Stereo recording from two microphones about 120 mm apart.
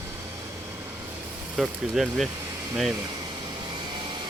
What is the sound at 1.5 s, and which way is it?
Speech, 5° right (ahead or behind).